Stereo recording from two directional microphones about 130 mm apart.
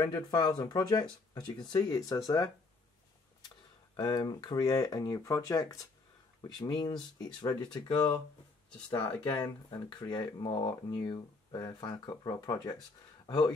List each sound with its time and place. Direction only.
0.0 s speech: 30° left (ahead or behind)
9.2 s speech: 30° left (ahead or behind)